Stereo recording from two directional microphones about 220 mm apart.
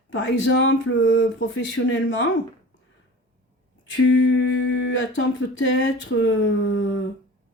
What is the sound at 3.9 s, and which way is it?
Speech, 55° left (ahead or behind).